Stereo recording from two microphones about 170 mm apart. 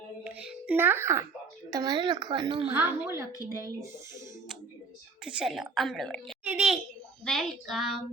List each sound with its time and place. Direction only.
0.3 s music: 10° right (ahead or behind)
1.7 s a child's voice: 25° right (ahead or behind)
2.6 s a woman's voice: 10° right (ahead or behind)
5.2 s a woman's voice: 5° right (ahead or behind)
6.4 s a sound: 5° right (ahead or behind)
7.3 s a woman's voice: centre (ahead or behind)